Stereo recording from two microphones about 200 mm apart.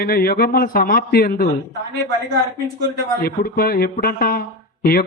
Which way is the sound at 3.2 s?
50° left (ahead or behind).